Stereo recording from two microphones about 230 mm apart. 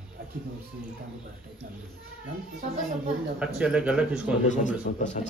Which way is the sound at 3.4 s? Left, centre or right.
Centre.